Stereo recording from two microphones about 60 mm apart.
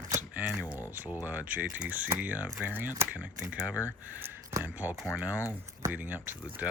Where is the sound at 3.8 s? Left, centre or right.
Right.